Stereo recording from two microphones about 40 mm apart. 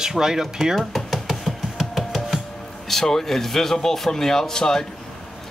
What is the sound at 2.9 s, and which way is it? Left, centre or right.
Speech, centre.